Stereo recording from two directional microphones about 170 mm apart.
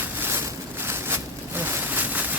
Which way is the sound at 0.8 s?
15° right (ahead or behind).